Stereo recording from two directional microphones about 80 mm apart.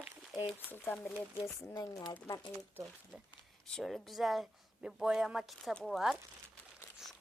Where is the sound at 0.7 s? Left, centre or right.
Left.